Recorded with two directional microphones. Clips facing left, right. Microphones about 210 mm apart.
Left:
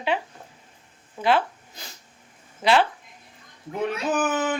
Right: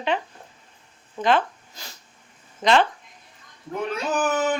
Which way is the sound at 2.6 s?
5° left (ahead or behind).